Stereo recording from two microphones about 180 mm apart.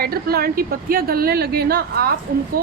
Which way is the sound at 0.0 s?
55° right (ahead or behind).